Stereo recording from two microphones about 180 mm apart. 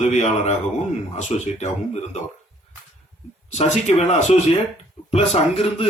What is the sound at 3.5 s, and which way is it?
A man's voice, 40° left (ahead or behind).